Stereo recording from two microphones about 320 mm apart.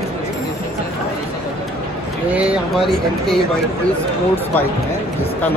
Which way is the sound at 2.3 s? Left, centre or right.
Centre.